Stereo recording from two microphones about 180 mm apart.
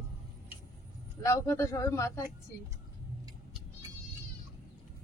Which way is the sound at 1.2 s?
15° left (ahead or behind).